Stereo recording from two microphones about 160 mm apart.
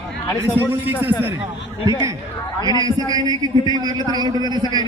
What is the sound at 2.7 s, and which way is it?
A man's voice, 25° right (ahead or behind).